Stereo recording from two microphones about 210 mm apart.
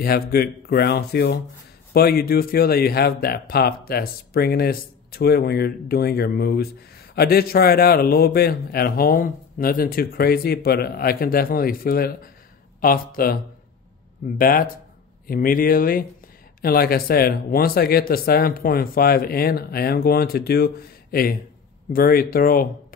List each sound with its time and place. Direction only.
0.0 s a man's voice: 45° left (ahead or behind)